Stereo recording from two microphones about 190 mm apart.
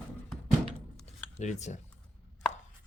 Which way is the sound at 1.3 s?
40° left (ahead or behind).